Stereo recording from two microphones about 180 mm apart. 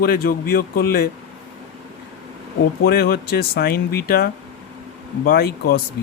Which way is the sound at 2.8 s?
60° left (ahead or behind).